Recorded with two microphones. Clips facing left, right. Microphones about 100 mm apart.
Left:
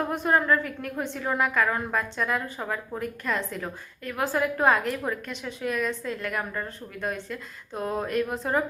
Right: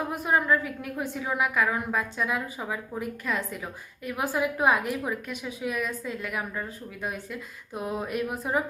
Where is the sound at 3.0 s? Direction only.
10° right (ahead or behind).